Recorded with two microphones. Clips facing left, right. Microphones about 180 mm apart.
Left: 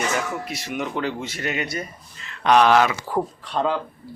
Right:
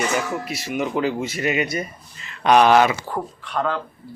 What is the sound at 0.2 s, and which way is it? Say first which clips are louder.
Speech: right 2 dB; 5° right (ahead or behind).